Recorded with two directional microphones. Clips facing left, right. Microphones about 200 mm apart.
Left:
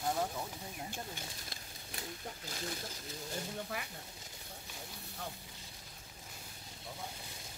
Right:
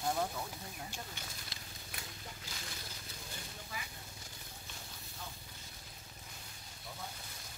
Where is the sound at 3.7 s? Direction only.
65° left (ahead or behind).